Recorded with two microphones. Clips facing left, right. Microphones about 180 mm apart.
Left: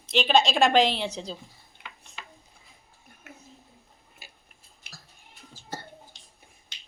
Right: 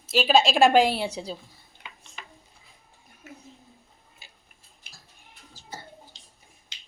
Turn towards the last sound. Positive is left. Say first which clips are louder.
# left 3 dB
turn(degrees=70)  # may be behind; listen again after turning